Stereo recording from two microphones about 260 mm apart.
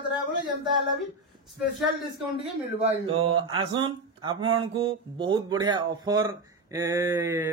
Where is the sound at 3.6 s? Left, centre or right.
Centre.